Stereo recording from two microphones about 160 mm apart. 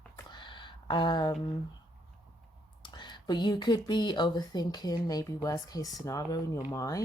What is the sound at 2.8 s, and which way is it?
Speech, 30° left (ahead or behind).